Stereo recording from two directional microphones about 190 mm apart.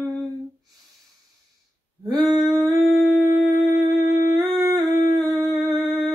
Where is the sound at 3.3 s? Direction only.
45° left (ahead or behind).